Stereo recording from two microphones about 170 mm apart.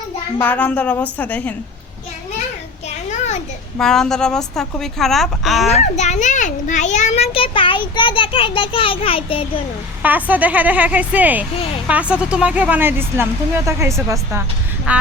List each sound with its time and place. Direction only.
0.3 s speech: 10° left (ahead or behind)
3.1 s children playing: 40° left (ahead or behind)
3.8 s a woman's voice: 5° left (ahead or behind)
5.6 s a child's voice: 40° left (ahead or behind)
10.0 s speech: 10° right (ahead or behind)